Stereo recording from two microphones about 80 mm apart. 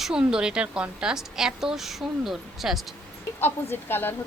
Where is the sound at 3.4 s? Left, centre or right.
Left.